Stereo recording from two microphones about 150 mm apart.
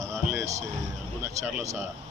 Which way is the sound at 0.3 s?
20° right (ahead or behind).